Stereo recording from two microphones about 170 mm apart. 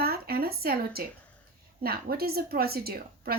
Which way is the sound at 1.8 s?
65° right (ahead or behind).